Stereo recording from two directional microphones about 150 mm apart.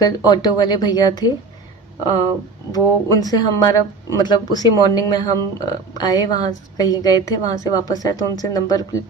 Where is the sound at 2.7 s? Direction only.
25° left (ahead or behind).